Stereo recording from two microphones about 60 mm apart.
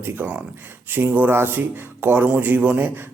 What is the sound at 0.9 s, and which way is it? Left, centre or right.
Speech, right.